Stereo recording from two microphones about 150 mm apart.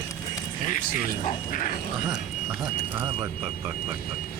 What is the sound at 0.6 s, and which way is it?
Speech, 60° left (ahead or behind).